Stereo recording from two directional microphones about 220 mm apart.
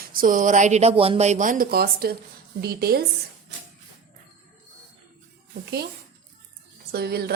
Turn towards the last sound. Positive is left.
turn(degrees=-45)  # may be behind; listen again after turning